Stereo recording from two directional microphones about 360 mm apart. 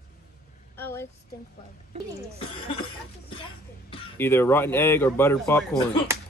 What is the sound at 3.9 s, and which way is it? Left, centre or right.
Speech, centre.